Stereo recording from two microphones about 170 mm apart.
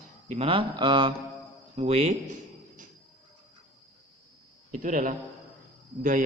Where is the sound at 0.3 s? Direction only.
30° right (ahead or behind).